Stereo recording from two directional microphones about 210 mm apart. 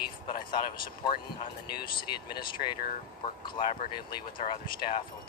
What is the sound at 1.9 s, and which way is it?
A man's voice, 20° left (ahead or behind).